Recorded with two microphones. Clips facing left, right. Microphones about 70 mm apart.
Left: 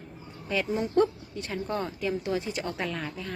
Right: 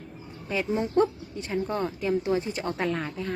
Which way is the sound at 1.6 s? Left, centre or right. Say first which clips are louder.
Right 1 dB; centre.